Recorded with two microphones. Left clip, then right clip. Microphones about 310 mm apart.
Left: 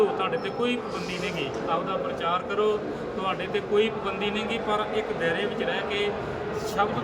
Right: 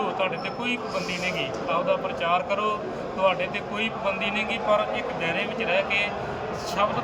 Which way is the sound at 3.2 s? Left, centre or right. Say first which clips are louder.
Right 6 dB; centre.